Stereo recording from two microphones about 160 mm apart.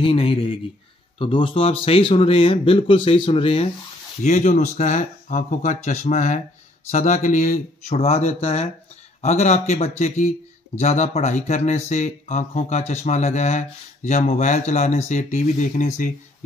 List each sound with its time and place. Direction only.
0.0 s speech: 35° left (ahead or behind)
4.2 s speech: 50° left (ahead or behind)